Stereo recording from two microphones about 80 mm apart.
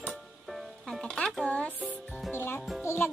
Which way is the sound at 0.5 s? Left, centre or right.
Centre.